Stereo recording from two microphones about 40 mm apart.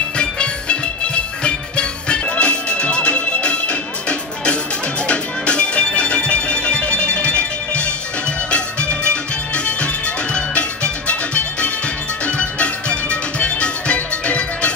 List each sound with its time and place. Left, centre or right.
0.2 s music: left